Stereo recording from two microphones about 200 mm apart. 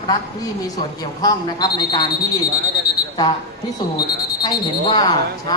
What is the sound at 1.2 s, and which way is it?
Speech, 20° left (ahead or behind).